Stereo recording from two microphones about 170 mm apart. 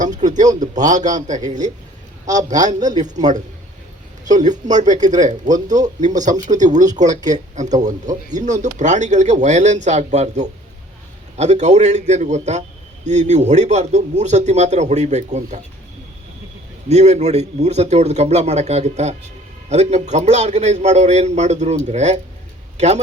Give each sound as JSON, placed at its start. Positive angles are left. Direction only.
{"t": 0.0, "sound": "a man's voice", "side_deg": -45}
{"t": 16.9, "sound": "a man's voice", "side_deg": -40}